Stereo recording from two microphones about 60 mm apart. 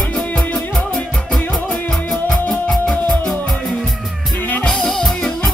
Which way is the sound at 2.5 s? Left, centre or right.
Centre.